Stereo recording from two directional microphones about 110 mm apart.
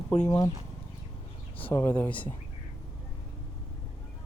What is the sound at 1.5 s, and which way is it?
Speech, 20° left (ahead or behind).